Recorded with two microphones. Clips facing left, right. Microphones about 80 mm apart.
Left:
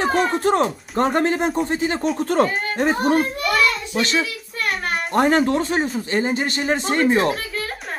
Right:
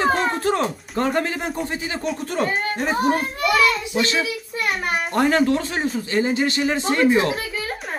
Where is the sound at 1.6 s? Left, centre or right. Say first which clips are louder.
Left 5 dB; left.